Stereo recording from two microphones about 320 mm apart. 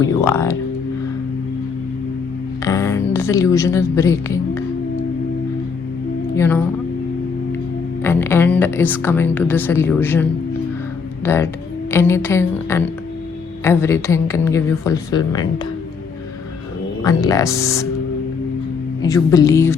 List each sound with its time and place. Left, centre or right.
0.0 s a woman's voice: centre
2.6 s a sound: centre
6.3 s speech: centre
8.0 s a woman's voice: centre
17.0 s a woman's voice: centre
19.0 s a woman's voice: centre